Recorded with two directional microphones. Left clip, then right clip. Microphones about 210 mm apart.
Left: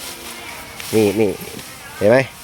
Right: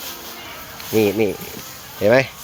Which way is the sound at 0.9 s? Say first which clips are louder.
Left 2 dB; 10° left (ahead or behind).